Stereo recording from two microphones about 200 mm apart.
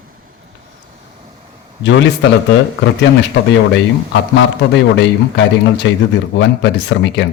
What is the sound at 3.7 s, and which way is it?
Speech, 65° left (ahead or behind).